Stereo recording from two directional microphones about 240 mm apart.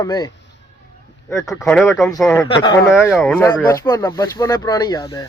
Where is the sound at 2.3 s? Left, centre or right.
Centre.